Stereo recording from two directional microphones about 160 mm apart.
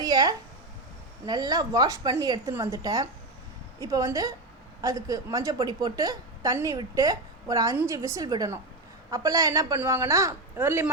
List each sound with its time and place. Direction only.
0.0 s a woman's voice: 25° right (ahead or behind)